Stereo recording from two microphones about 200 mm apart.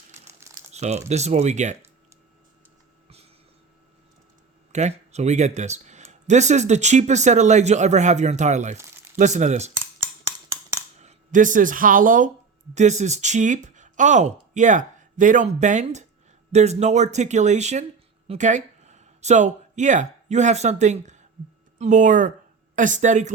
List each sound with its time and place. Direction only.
0.7 s speech: 35° right (ahead or behind)
4.7 s speech: 35° right (ahead or behind)
10.0 s a sound: 15° right (ahead or behind)
11.0 s speech: 40° right (ahead or behind)